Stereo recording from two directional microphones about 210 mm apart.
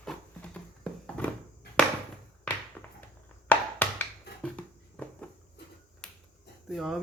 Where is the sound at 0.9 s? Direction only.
5° left (ahead or behind).